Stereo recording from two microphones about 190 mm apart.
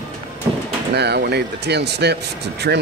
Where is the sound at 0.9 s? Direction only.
60° right (ahead or behind).